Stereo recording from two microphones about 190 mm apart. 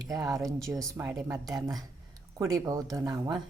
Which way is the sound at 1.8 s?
20° right (ahead or behind).